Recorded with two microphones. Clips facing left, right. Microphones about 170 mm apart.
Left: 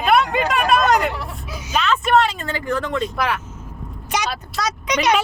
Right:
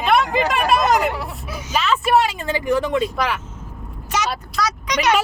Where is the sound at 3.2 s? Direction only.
Centre (ahead or behind).